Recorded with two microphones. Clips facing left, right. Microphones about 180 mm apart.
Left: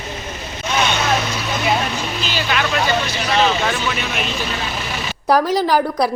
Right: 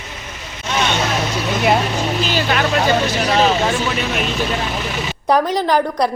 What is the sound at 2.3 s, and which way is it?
Vehicle, 45° right (ahead or behind).